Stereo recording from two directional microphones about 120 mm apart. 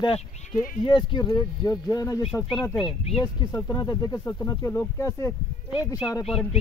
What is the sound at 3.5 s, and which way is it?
Speech, 35° left (ahead or behind).